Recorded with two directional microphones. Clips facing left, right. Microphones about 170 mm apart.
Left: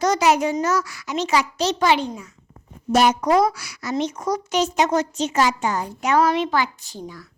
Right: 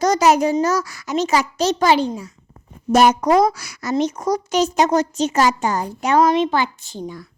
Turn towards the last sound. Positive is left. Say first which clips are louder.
# right 5 dB
turn(degrees=-25)  # may be behind; listen again after turning